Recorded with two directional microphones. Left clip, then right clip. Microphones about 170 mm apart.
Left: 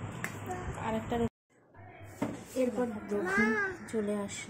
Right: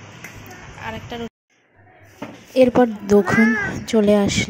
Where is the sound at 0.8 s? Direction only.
5° left (ahead or behind).